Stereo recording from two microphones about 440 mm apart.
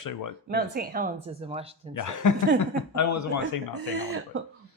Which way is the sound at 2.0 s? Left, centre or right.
Left.